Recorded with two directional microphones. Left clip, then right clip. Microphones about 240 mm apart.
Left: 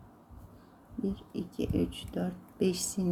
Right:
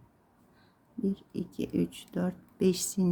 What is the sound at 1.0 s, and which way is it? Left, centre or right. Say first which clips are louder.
Speech: right 2 dB; centre.